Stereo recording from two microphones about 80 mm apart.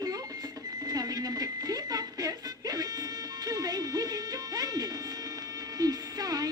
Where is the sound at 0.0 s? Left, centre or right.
Right.